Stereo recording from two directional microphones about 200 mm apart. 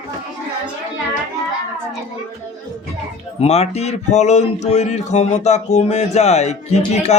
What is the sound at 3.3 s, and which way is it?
A man's voice, 30° left (ahead or behind).